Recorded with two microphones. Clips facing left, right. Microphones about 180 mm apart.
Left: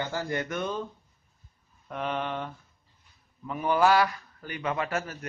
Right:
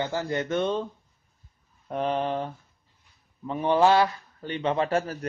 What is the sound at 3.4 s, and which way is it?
Speech, 30° right (ahead or behind).